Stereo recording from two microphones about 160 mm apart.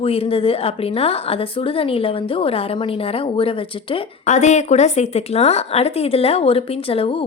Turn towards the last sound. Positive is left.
turn(degrees=35)  # may be behind; listen again after turning